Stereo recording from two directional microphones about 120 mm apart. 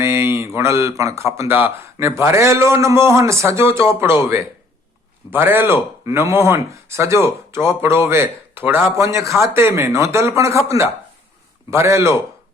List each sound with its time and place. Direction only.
0.0 s a man's voice: 25° right (ahead or behind)